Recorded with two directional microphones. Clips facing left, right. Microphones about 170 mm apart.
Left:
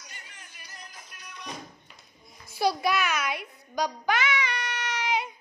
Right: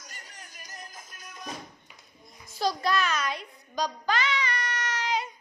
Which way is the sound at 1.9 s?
10° right (ahead or behind).